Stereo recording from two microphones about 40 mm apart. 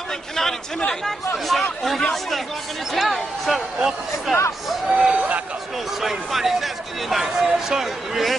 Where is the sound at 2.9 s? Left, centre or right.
Centre.